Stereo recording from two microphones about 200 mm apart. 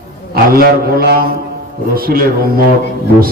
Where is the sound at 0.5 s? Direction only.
50° right (ahead or behind).